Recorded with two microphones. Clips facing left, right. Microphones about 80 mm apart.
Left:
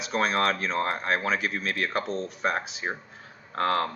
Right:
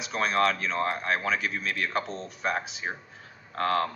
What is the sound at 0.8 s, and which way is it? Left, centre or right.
Speech, centre.